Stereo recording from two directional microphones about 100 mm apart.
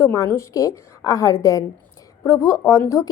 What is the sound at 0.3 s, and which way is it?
A woman's voice, 30° left (ahead or behind).